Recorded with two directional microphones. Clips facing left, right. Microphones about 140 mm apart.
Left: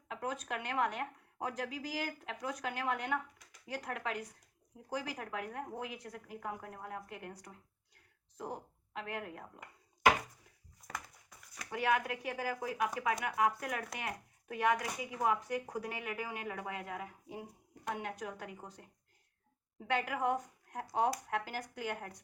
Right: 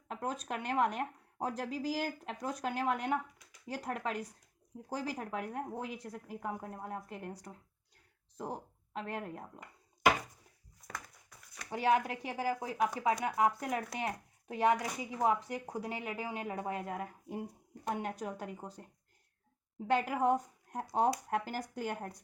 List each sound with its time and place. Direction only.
0.1 s speech: 40° right (ahead or behind)
8.4 s speech: 35° right (ahead or behind)
10.8 s a sound: centre (ahead or behind)
11.7 s speech: 30° right (ahead or behind)
20.1 s a woman's voice: 35° right (ahead or behind)